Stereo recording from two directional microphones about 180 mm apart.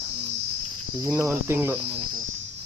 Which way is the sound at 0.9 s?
15° right (ahead or behind).